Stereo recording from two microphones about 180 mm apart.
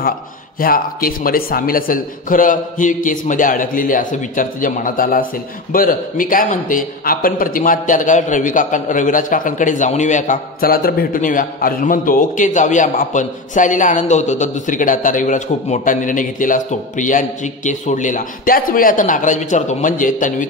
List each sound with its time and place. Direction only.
0.6 s a man's voice: 55° left (ahead or behind)